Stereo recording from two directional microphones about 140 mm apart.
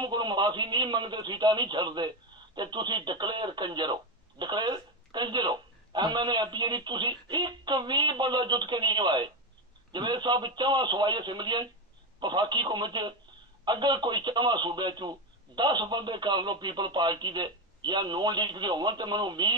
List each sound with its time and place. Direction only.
0.0 s a man's voice: 30° right (ahead or behind)